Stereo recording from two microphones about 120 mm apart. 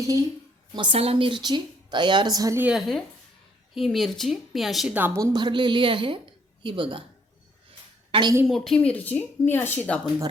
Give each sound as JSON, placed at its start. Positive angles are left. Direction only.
{"t": 0.0, "sound": "a woman's voice", "side_deg": -25}
{"t": 0.7, "sound": "a woman's voice", "side_deg": -40}
{"t": 0.9, "sound": "a woman's voice", "side_deg": -55}
{"t": 2.7, "sound": "a woman's voice", "side_deg": 0}
{"t": 5.1, "sound": "speech", "side_deg": -30}
{"t": 8.1, "sound": "a woman's voice", "side_deg": -45}
{"t": 8.4, "sound": "speech", "side_deg": 0}